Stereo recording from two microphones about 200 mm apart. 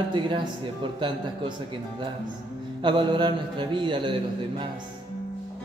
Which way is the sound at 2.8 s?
25° right (ahead or behind).